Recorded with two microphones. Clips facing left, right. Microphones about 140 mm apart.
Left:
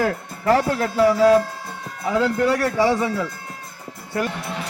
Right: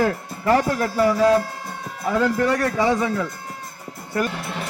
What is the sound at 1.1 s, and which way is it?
Speech, 10° left (ahead or behind).